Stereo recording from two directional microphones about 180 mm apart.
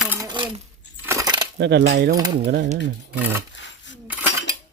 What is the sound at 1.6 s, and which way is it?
Cutlery, 75° right (ahead or behind).